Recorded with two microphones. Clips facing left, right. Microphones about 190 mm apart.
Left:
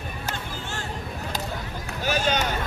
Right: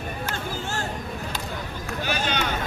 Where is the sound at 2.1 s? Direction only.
45° left (ahead or behind).